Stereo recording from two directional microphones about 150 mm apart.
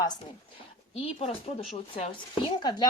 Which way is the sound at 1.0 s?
40° left (ahead or behind).